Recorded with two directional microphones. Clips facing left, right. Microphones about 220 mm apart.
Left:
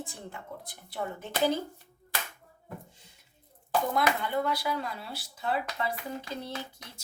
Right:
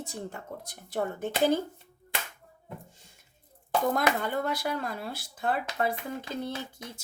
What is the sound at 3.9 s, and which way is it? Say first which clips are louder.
Speech: right 1 dB; 45° right (ahead or behind).